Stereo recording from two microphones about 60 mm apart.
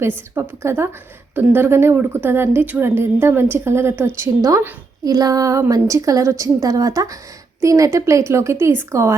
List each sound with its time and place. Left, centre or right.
0.3 s a woman's voice: right
2.8 s a woman's voice: right
4.4 s a woman's voice: right
5.0 s a woman's voice: right
7.6 s a woman's voice: right